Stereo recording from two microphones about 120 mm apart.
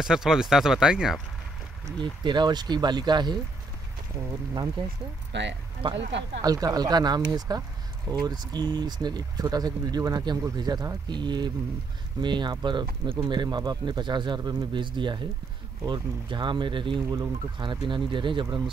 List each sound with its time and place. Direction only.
0.0 s speech: 5° right (ahead or behind)
2.2 s speech: 40° right (ahead or behind)
4.8 s speech: 45° right (ahead or behind)
6.4 s speech: 30° right (ahead or behind)